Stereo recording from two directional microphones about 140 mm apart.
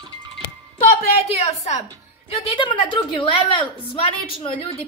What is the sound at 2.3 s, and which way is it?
A woman's voice, 40° left (ahead or behind).